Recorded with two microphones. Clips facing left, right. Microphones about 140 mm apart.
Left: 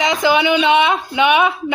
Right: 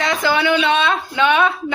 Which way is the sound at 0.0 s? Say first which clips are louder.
Left 3 dB; 15° left (ahead or behind).